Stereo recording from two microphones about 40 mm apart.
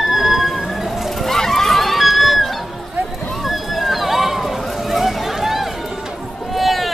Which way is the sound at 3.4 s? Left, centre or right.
Centre.